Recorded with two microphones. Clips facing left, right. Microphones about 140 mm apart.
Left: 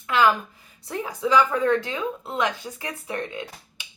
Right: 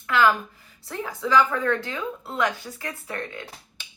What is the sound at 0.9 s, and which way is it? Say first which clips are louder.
Speech: left 2 dB; 15° left (ahead or behind).